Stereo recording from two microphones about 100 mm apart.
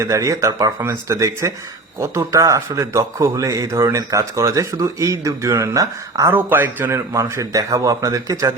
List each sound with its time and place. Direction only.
0.0 s a man's voice: 30° right (ahead or behind)
6.3 s speech: 20° right (ahead or behind)
7.1 s a man's voice: 35° right (ahead or behind)